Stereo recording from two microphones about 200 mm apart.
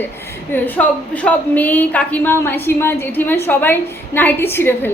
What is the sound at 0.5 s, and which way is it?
A woman's voice, 10° left (ahead or behind).